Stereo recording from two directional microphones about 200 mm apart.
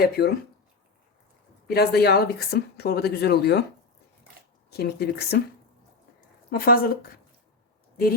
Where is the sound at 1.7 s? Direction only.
50° left (ahead or behind).